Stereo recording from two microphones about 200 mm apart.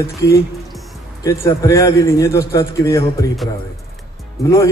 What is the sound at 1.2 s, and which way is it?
A man's voice, 15° left (ahead or behind).